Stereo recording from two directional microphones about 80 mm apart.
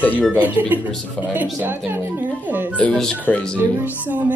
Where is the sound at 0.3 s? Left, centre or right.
Centre.